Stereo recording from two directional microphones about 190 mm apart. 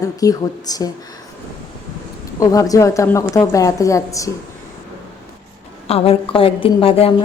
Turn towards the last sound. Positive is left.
turn(degrees=30)  # may be behind; listen again after turning